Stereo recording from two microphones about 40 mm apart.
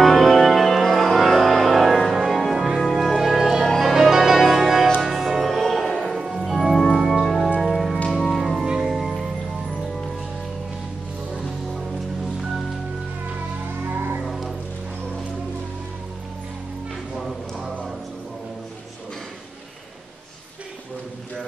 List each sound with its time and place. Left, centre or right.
0.0 s music: centre
3.2 s music: centre
5.9 s music: centre
7.0 s music: centre
7.6 s music: centre
8.4 s music: centre
8.6 s music: centre
8.9 s music: centre
13.8 s music: right
14.2 s music: centre
17.2 s a sound: centre